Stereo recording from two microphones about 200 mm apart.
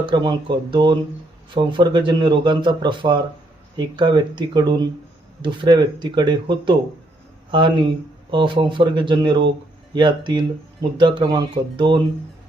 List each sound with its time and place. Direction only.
0.0 s speech: 25° right (ahead or behind)
8.3 s speech: 25° right (ahead or behind)